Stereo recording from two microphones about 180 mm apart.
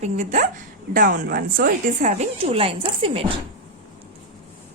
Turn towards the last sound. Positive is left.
turn(degrees=-30)  # may be behind; listen again after turning